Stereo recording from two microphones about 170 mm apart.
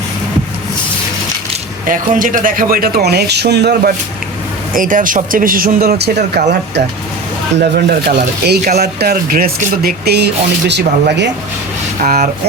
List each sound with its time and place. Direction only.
1.9 s speech: 50° right (ahead or behind); by 3.9 s 75° right (ahead or behind)
4.7 s speech: 50° right (ahead or behind)
6.3 s speech: 75° right (ahead or behind)
12.0 s speech: 55° right (ahead or behind)